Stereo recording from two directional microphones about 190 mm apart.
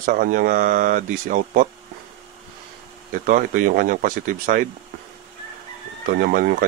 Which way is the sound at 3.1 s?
45° right (ahead or behind).